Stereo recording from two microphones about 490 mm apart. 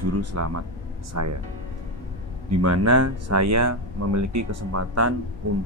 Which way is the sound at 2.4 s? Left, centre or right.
Right.